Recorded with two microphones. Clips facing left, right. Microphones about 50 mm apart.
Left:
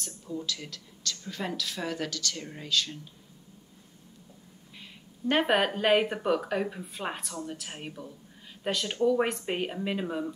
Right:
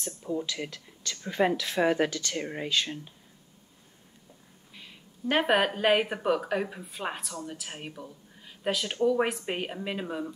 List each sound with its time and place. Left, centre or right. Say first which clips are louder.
0.0 s speech: right 4 dB; right
4.7 s speech: even; centre